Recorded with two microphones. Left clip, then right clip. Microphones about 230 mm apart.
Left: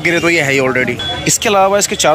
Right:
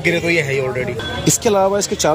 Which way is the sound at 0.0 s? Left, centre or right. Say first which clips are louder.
Left 4 dB; centre.